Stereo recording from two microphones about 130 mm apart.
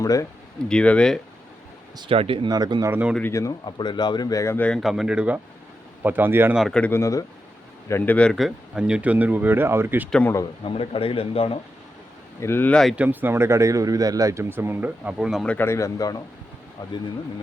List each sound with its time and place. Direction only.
0.0 s speech: 25° left (ahead or behind)
0.7 s speech: 10° left (ahead or behind)
2.0 s speech: 45° right (ahead or behind)
2.5 s speech: 35° right (ahead or behind)
2.8 s speech: 15° right (ahead or behind)
3.7 s speech: 35° left (ahead or behind); by 4.8 s 15° left (ahead or behind)
4.8 s speech: centre (ahead or behind)
6.6 s speech: 5° left (ahead or behind)
6.9 s speech: 25° left (ahead or behind); by 10.1 s 15° right (ahead or behind)
10.1 s speech: 10° left (ahead or behind)
10.6 s speech: 45° left (ahead or behind)
12.4 s speech: 20° left (ahead or behind)
13.0 s speech: 15° right (ahead or behind)
15.4 s speech: 15° left (ahead or behind)